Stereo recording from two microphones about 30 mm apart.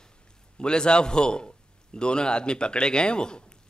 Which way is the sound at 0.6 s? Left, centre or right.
Left.